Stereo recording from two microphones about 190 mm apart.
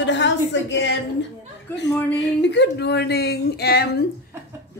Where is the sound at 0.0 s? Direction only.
70° left (ahead or behind).